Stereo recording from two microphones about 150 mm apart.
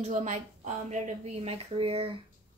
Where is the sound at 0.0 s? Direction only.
55° right (ahead or behind).